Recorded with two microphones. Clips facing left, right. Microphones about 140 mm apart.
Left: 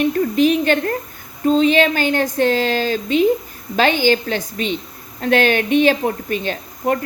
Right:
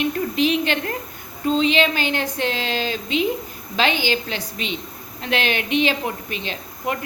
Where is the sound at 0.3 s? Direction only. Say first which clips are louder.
Left 5 dB; 45° left (ahead or behind).